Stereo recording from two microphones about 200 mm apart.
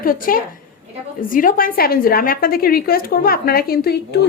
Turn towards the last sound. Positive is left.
turn(degrees=50)  # may be behind; listen again after turning